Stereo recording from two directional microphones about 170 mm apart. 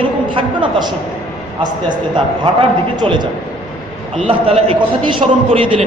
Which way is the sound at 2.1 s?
25° right (ahead or behind).